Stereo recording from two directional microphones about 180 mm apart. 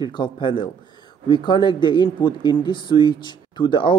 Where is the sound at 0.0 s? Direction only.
25° left (ahead or behind).